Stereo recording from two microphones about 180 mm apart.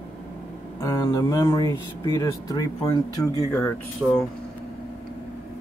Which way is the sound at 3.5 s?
10° left (ahead or behind).